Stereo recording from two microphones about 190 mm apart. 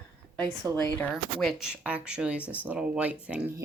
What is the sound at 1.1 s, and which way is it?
Speech, centre (ahead or behind).